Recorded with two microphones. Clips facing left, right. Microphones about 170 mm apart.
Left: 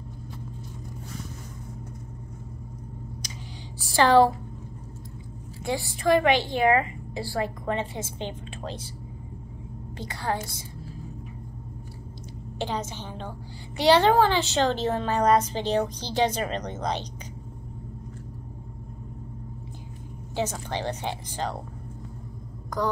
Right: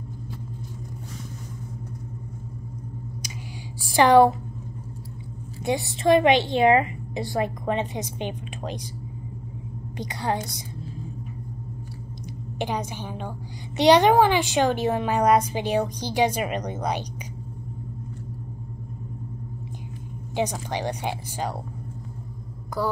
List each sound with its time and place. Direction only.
3.8 s a woman's voice: 15° right (ahead or behind)
5.6 s a woman's voice: 20° right (ahead or behind)
9.9 s a woman's voice: 20° right (ahead or behind)
12.5 s a woman's voice: 15° right (ahead or behind)
20.3 s a woman's voice: 15° right (ahead or behind)
22.8 s a woman's voice: 10° right (ahead or behind)